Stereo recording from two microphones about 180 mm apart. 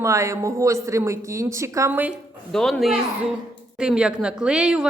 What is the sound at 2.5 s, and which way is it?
A woman's voice, centre (ahead or behind).